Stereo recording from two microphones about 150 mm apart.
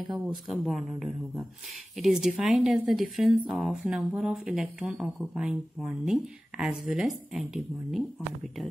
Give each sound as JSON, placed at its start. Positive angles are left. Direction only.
{"t": 0.1, "sound": "a woman's voice", "side_deg": 0}